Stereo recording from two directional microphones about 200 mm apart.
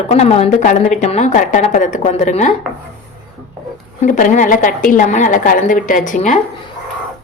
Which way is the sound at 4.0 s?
40° left (ahead or behind).